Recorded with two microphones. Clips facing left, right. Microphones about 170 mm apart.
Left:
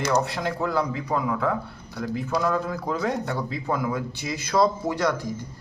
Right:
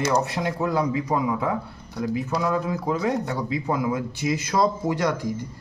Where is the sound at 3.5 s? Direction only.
15° right (ahead or behind).